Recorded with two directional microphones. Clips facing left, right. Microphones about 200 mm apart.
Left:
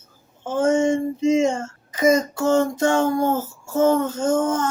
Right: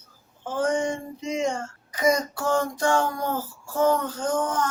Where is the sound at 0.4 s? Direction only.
25° left (ahead or behind).